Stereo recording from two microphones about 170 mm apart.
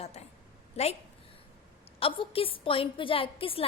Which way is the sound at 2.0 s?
35° left (ahead or behind).